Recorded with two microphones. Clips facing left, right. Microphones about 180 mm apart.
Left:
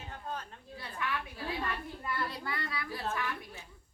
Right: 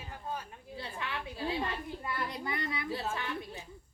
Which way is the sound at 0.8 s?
25° right (ahead or behind).